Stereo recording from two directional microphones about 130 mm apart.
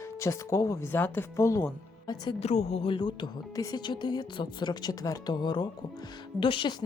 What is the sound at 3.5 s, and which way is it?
A woman's voice, 30° left (ahead or behind).